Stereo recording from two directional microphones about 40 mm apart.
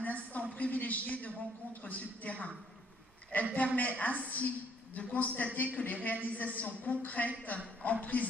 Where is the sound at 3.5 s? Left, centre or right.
Left.